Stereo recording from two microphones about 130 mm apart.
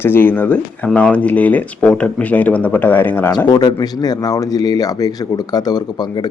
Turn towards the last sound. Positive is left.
turn(degrees=30)  # may be behind; listen again after turning